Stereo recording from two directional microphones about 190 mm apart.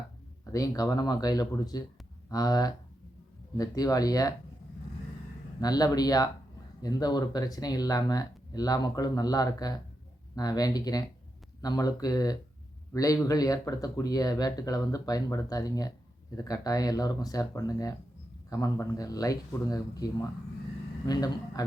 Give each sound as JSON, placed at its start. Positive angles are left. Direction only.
{"t": 0.5, "sound": "speech", "side_deg": 20}
{"t": 5.5, "sound": "speech", "side_deg": 20}
{"t": 21.1, "sound": "speech", "side_deg": 20}